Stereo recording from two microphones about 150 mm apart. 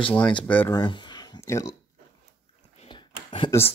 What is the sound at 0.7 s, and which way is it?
Speech, 30° left (ahead or behind).